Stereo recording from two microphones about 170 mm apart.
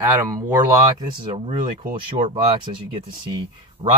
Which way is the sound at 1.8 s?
55° right (ahead or behind).